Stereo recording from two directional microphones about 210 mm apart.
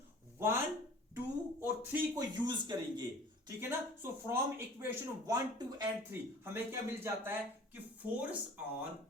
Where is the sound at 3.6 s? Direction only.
10° right (ahead or behind).